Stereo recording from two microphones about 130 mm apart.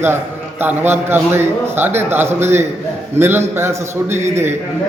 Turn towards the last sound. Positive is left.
turn(degrees=-20)  # may be behind; listen again after turning